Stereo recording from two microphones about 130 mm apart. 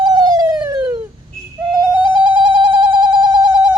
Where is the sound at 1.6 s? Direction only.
25° right (ahead or behind).